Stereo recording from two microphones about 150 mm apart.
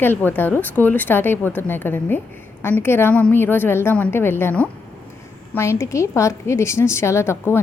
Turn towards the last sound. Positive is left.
turn(degrees=15)  # may be behind; listen again after turning